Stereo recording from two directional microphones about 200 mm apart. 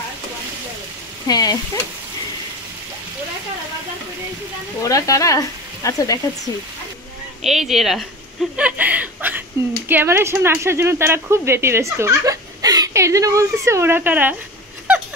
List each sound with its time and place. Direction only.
1.2 s speech: 20° left (ahead or behind)
4.8 s speech: 15° left (ahead or behind)
7.4 s a woman's voice: centre (ahead or behind)